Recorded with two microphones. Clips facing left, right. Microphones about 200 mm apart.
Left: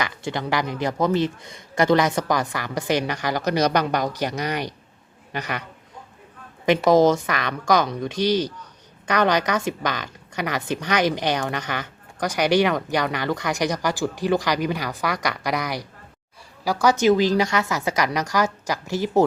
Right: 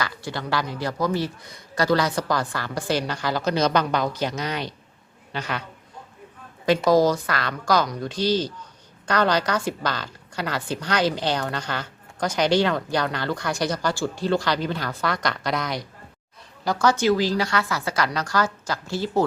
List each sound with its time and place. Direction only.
0.0 s a woman's voice: 20° left (ahead or behind)
6.7 s a woman's voice: 20° left (ahead or behind)